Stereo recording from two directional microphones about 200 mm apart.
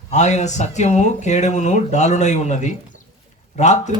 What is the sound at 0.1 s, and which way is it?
Speech, 35° left (ahead or behind).